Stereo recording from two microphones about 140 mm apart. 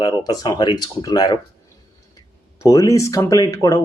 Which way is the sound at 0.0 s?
30° left (ahead or behind).